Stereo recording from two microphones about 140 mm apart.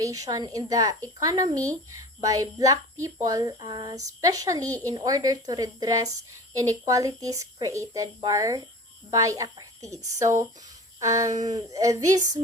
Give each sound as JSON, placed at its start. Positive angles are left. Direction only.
{"t": 0.0, "sound": "speech", "side_deg": -25}